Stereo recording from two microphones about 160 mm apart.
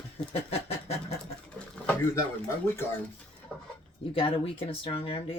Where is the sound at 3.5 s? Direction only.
10° left (ahead or behind).